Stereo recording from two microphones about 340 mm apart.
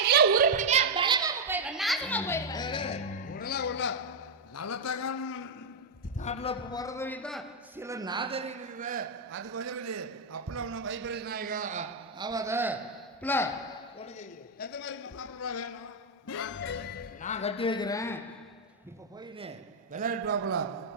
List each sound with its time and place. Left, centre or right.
0.0 s a sound: right; by 3.9 s left
4.5 s a sound: left
6.1 s a man's voice: centre; by 9.0 s right
9.3 s a man's voice: right; by 12.7 s centre
13.2 s a man's voice: centre
14.0 s a man's voice: left
16.2 s music: left
17.2 s a man's voice: left
19.2 s a man's voice: centre; by 20.7 s right